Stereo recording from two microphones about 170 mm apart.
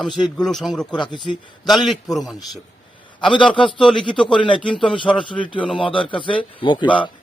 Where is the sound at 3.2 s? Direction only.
30° left (ahead or behind).